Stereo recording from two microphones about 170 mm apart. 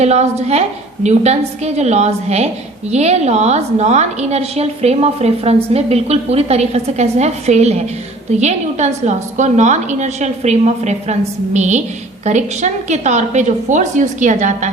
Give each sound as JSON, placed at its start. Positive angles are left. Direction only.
{"t": 0.0, "sound": "a woman's voice", "side_deg": -40}